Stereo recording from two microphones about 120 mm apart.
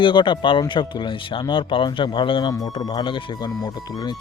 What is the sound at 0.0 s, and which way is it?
Speech, 40° left (ahead or behind).